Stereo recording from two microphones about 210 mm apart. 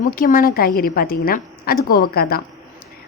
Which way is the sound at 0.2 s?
40° left (ahead or behind).